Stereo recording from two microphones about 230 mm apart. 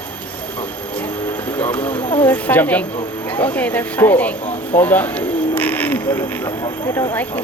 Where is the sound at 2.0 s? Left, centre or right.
Left.